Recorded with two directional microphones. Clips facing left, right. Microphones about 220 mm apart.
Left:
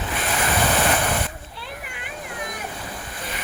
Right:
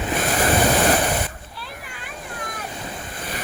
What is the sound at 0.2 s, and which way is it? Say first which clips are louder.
Waves: right 3 dB; 40° right (ahead or behind).